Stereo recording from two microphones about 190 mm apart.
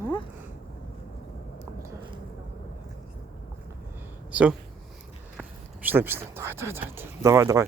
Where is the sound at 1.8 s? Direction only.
25° right (ahead or behind).